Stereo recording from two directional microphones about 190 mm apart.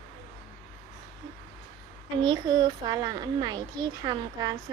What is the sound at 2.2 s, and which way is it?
A child's voice, 25° right (ahead or behind).